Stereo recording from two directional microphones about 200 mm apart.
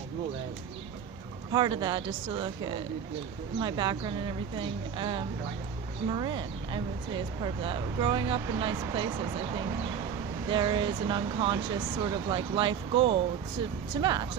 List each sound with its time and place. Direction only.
1.5 s speech: 20° right (ahead or behind)
10.5 s speech: 20° right (ahead or behind)